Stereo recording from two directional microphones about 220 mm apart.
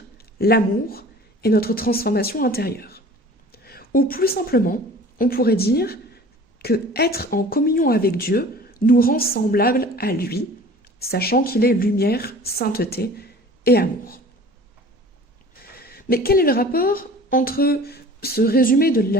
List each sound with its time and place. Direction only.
0.2 s a woman's voice: 45° left (ahead or behind)
15.8 s a woman's voice: 45° left (ahead or behind)